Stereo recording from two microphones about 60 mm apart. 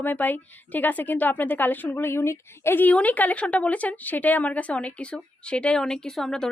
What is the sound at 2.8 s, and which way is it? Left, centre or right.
A woman's voice, left.